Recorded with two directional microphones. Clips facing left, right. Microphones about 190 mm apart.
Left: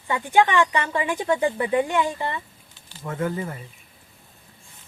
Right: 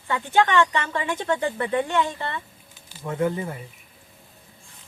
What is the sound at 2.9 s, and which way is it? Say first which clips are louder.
Speech: right 3 dB; 15° right (ahead or behind).